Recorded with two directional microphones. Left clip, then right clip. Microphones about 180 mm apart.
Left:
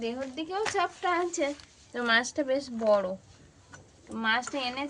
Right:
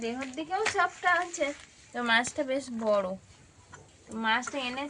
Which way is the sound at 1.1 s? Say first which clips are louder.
Right 1 dB; 35° left (ahead or behind).